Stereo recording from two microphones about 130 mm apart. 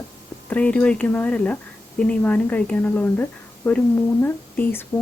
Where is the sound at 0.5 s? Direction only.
10° left (ahead or behind).